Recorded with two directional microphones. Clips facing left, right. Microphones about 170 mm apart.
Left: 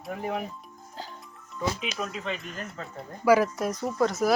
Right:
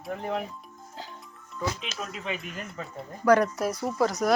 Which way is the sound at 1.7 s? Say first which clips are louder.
Left 4 dB; centre (ahead or behind).